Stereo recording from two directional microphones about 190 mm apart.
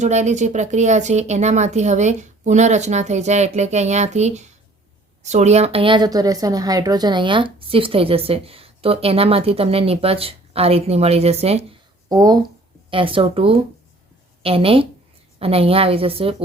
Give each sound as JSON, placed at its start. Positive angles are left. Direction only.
{"t": 0.0, "sound": "speech", "side_deg": -35}
{"t": 12.0, "sound": "a woman's voice", "side_deg": -20}